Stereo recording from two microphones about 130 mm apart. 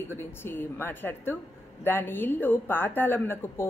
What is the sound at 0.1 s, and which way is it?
Speech, 15° left (ahead or behind).